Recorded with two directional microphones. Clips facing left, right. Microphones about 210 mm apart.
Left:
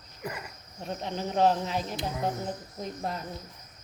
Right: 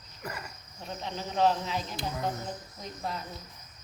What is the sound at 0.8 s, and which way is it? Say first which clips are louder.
Cricket: left 4 dB; 50° left (ahead or behind).